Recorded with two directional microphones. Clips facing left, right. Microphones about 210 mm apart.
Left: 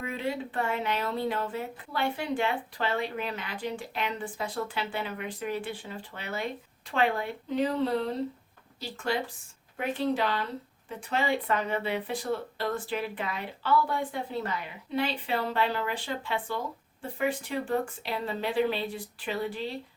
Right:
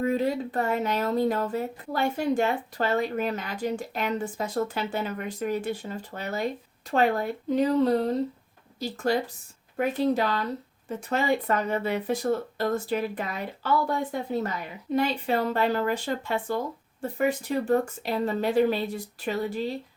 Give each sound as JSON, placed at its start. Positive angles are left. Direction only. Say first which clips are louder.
{"t": 0.0, "sound": "speech", "louder": "right 7 dB", "side_deg": -40}